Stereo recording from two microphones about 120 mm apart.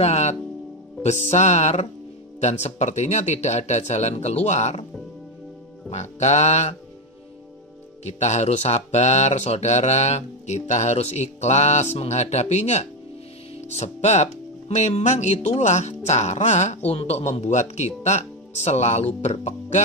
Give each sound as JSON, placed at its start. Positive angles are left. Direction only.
{"t": 0.0, "sound": "speech", "side_deg": 70}
{"t": 5.9, "sound": "speech", "side_deg": 70}
{"t": 8.0, "sound": "speech", "side_deg": 70}
{"t": 16.9, "sound": "speech", "side_deg": 60}